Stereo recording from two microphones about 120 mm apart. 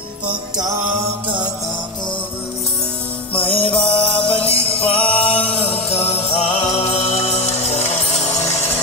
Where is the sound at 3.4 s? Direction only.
50° left (ahead or behind); by 8.3 s 65° left (ahead or behind).